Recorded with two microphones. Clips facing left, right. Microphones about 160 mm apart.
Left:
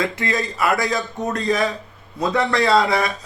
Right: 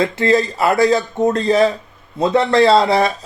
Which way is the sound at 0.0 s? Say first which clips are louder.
Right 8 dB; 30° right (ahead or behind).